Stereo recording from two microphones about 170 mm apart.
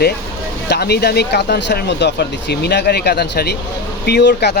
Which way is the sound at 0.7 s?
70° left (ahead or behind).